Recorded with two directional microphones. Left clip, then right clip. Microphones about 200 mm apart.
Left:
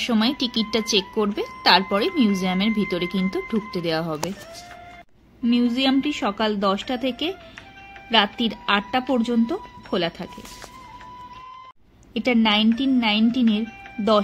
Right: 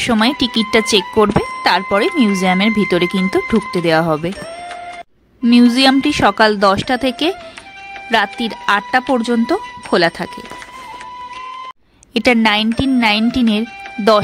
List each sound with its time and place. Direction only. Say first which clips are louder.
0.0 s speech: right 8 dB; 50° right (ahead or behind)
5.4 s speech: right 10 dB; 45° right (ahead or behind)
12.1 s speech: right 8 dB; 50° right (ahead or behind)